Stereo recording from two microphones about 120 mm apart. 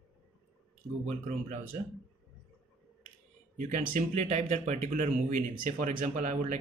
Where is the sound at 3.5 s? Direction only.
90° right.